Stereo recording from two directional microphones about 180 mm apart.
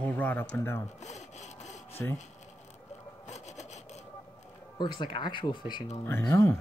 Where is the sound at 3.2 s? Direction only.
40° left (ahead or behind).